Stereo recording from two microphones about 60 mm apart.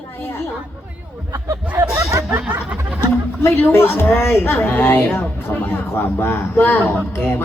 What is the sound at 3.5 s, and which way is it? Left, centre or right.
A man's voice, left.